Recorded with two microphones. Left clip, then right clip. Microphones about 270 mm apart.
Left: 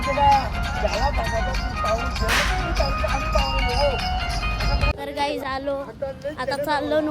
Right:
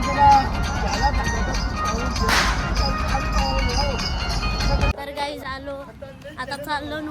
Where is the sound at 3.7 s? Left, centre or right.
Centre.